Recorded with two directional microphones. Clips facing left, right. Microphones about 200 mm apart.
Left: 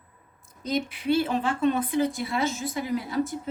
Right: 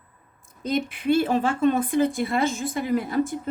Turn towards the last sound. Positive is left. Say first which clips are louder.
# right 4 dB
turn(degrees=-55)  # may be behind; listen again after turning